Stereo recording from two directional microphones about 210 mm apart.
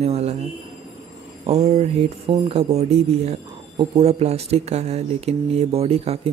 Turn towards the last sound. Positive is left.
turn(degrees=-30)  # may be behind; listen again after turning